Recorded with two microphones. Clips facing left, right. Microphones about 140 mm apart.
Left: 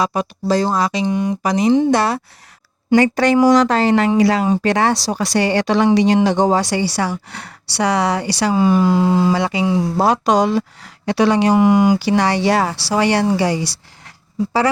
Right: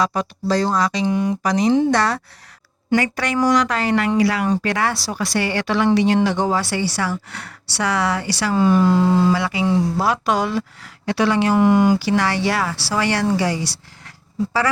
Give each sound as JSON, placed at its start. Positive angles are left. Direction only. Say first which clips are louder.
{"t": 0.0, "sound": "speech", "louder": "left 2 dB", "side_deg": 15}
{"t": 1.0, "sound": "speech", "louder": "left 1 dB", "side_deg": -5}
{"t": 1.4, "sound": "speech", "louder": "left 3 dB", "side_deg": 20}
{"t": 2.9, "sound": "speech", "louder": "left 7 dB", "side_deg": 30}
{"t": 9.3, "sound": "speech", "louder": "left 2 dB", "side_deg": 25}
{"t": 11.6, "sound": "speech", "louder": "even", "side_deg": 5}
{"t": 11.9, "sound": "speech", "louder": "left 3 dB", "side_deg": 15}